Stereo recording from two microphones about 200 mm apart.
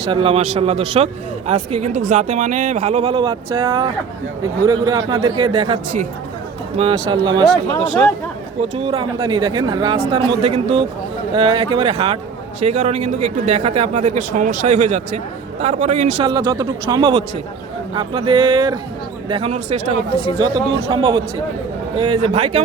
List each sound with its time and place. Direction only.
0.1 s a man's voice: 25° right (ahead or behind)
8.7 s a man's voice: 30° right (ahead or behind)
16.2 s a man's voice: 20° right (ahead or behind)
20.4 s speech: 20° right (ahead or behind)